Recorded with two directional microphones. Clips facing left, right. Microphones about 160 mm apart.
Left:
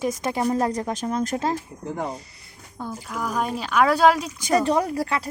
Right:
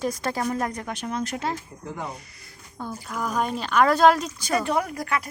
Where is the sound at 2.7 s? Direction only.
5° left (ahead or behind).